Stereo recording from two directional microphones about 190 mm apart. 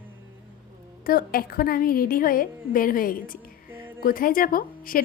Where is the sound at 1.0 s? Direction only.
50° left (ahead or behind).